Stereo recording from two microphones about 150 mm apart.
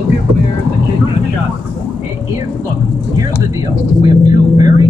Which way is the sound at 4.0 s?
25° right (ahead or behind).